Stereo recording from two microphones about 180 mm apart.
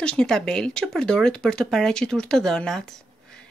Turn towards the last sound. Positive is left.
turn(degrees=5)  # may be behind; listen again after turning